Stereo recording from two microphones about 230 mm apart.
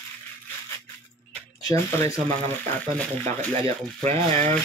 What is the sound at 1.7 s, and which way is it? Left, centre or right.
Speech, centre.